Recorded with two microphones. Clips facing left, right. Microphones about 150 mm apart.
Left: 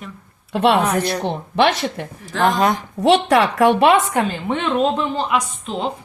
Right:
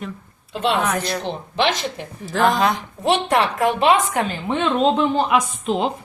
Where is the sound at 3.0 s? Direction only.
85° left.